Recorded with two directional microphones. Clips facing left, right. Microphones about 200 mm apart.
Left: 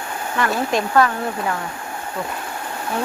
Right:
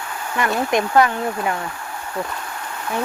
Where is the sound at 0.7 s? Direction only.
15° right (ahead or behind).